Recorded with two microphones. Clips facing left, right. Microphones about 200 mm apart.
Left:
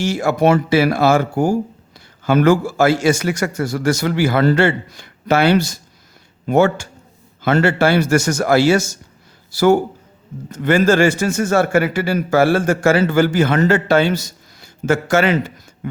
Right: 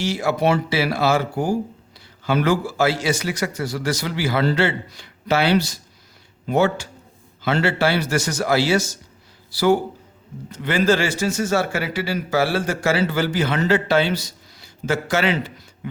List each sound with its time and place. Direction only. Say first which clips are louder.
0.0 s a man's voice: left 4 dB; 50° left (ahead or behind)